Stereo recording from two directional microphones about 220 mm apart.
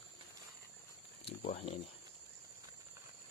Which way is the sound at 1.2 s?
30° left (ahead or behind).